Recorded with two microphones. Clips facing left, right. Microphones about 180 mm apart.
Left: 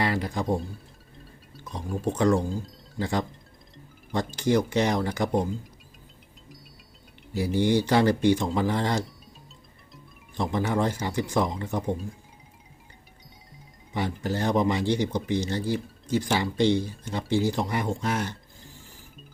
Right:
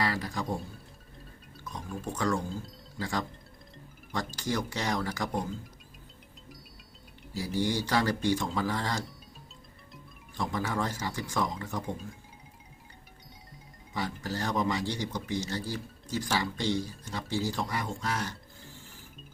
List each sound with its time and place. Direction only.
0.0 s speech: 20° left (ahead or behind)
1.7 s speech: 20° left (ahead or behind)
7.6 s speech: 20° left (ahead or behind)
10.3 s speech: 20° left (ahead or behind)
13.9 s speech: 20° left (ahead or behind)